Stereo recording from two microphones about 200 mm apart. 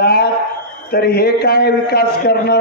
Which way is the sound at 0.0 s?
50° left (ahead or behind).